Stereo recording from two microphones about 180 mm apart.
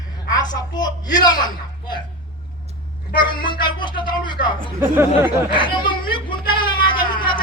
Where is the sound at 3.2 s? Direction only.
25° left (ahead or behind).